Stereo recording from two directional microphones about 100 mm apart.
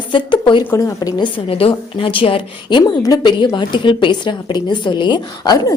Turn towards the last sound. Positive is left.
turn(degrees=45)  # may be behind; listen again after turning